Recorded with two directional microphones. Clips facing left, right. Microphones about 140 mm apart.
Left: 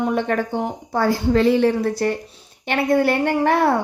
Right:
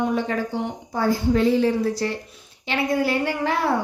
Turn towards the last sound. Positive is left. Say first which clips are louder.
# left 6 dB
turn(degrees=60)  # may be behind; listen again after turning